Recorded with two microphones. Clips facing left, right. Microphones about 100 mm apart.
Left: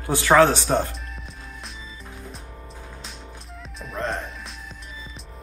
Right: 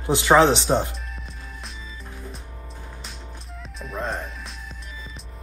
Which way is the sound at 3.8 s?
Centre (ahead or behind).